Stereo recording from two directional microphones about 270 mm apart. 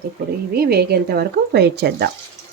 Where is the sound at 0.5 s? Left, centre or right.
Right.